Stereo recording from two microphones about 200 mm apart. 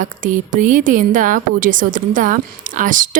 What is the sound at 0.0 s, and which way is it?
A woman's voice, 40° right (ahead or behind).